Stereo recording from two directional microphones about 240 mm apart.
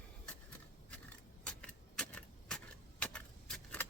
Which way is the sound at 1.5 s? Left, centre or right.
Centre.